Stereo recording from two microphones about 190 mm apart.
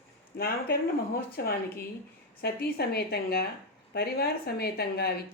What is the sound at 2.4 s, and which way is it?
A woman's voice, 55° left (ahead or behind).